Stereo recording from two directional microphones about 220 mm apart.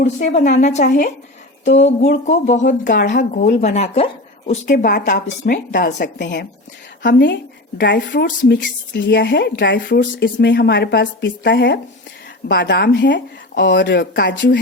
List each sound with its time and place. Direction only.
0.0 s a woman's voice: 35° left (ahead or behind); by 14.6 s 55° left (ahead or behind)